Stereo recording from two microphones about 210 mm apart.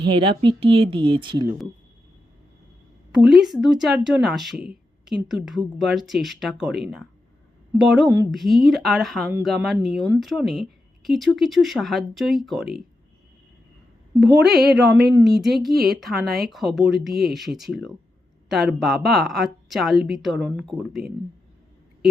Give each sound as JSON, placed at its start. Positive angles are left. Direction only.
{"t": 0.0, "sound": "speech", "side_deg": -25}
{"t": 3.2, "sound": "speech", "side_deg": 0}
{"t": 14.4, "sound": "speech", "side_deg": 0}